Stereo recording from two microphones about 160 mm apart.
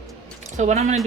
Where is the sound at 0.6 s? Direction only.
45° right (ahead or behind).